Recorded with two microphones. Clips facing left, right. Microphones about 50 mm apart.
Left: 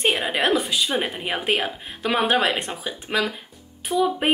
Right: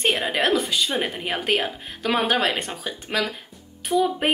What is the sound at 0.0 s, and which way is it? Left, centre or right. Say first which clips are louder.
A woman's voice: even; centre.